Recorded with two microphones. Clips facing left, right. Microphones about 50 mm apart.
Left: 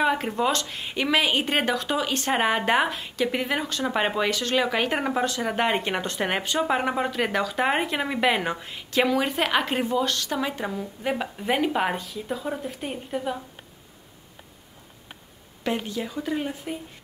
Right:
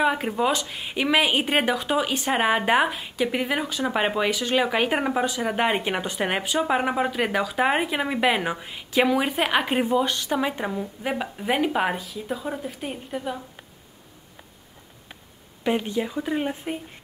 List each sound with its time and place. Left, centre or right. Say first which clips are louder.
0.0 s speech: right 1 dB; centre
15.6 s speech: right 4 dB; centre